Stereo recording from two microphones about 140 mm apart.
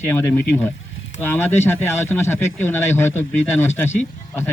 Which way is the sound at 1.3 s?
15° left (ahead or behind).